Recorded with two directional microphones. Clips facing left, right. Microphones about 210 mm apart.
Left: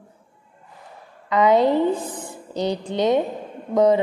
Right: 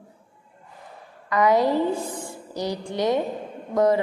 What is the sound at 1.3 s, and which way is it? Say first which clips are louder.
A woman's voice: left 3 dB; 25° left (ahead or behind).